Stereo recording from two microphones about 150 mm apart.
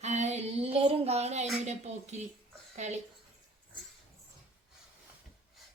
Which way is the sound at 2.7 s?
50° right (ahead or behind).